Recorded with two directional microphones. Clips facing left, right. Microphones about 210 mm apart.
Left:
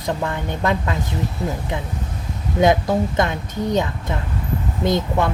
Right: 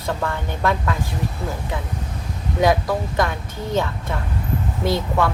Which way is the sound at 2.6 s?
20° left (ahead or behind).